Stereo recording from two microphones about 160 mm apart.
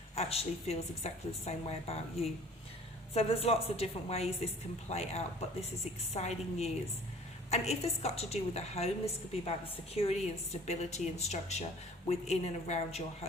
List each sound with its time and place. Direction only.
0.2 s a woman's voice: 40° left (ahead or behind)
9.9 s a woman's voice: 40° left (ahead or behind)